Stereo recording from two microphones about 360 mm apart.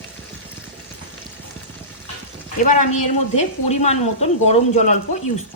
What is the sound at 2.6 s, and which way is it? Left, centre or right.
Speech, centre.